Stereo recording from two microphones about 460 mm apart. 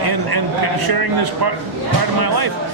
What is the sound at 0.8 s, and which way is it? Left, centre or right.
Speech, right.